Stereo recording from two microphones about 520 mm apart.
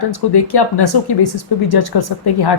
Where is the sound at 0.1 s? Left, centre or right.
Left.